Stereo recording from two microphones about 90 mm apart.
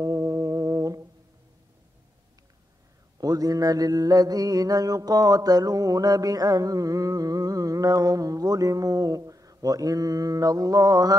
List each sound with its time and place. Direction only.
0.0 s music: 40° right (ahead or behind)
3.2 s mantra: 45° right (ahead or behind)